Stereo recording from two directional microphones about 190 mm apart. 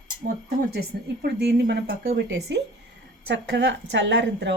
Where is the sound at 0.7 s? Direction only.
55° right (ahead or behind).